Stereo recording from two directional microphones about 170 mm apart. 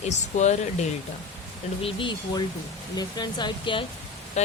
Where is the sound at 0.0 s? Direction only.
45° left (ahead or behind).